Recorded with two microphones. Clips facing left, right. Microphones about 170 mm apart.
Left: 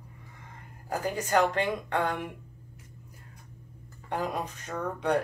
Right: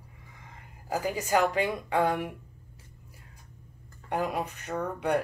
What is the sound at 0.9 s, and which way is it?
Speech, 10° right (ahead or behind).